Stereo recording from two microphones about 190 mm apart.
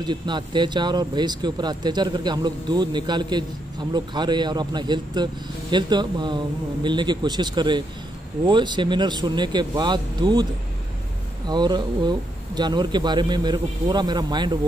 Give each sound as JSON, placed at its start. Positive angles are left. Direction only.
{"t": 0.0, "sound": "a man's voice", "side_deg": -25}
{"t": 11.4, "sound": "a man's voice", "side_deg": -25}